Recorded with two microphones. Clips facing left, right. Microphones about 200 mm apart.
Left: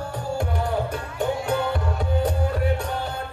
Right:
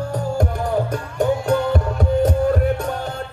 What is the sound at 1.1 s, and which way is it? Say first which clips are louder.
Music: right 6 dB; 45° right (ahead or behind).